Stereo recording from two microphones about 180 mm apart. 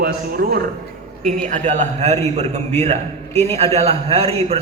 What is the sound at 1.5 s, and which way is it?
A man's voice, 40° right (ahead or behind).